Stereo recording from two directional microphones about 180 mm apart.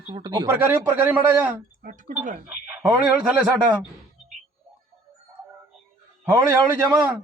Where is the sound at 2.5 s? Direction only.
10° right (ahead or behind).